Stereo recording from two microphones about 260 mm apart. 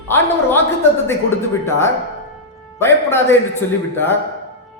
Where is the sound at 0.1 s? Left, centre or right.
Centre.